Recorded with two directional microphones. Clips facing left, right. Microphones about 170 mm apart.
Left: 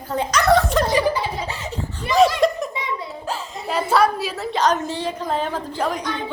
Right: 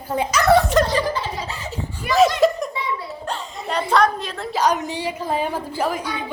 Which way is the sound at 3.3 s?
5° left (ahead or behind).